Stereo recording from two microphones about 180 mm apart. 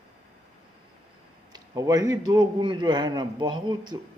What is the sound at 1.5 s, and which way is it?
A man's voice, 20° right (ahead or behind).